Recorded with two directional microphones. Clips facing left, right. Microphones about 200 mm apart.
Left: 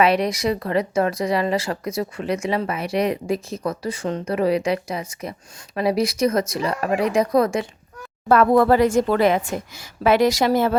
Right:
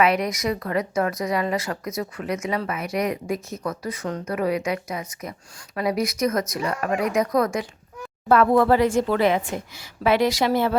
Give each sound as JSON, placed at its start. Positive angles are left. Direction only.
{"t": 0.0, "sound": "speech", "side_deg": 30}
{"t": 8.3, "sound": "a woman's voice", "side_deg": 45}